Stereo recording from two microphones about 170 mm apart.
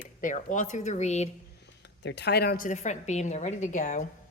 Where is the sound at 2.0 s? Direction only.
85° left; by 4.0 s 45° left (ahead or behind).